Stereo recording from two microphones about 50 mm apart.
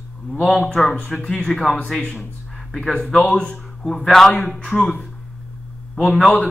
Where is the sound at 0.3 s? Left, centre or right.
Centre.